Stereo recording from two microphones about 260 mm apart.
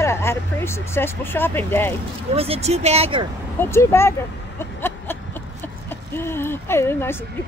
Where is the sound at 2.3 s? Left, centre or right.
Right.